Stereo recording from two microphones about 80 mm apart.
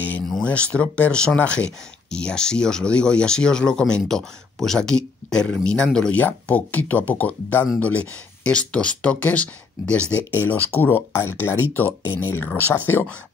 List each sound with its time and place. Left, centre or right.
0.4 s speech: centre